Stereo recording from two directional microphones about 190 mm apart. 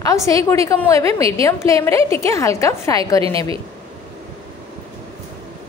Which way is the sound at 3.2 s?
30° right (ahead or behind).